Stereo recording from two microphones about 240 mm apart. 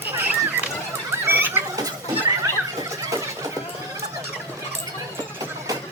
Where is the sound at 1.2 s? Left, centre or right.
Centre.